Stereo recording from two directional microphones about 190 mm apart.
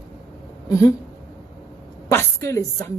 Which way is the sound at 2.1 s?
15° left (ahead or behind).